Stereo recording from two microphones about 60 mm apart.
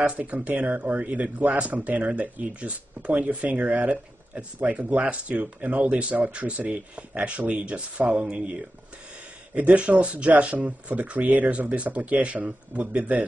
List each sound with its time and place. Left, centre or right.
0.0 s speech: right